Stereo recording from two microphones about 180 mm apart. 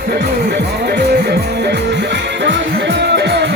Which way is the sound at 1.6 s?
70° right (ahead or behind).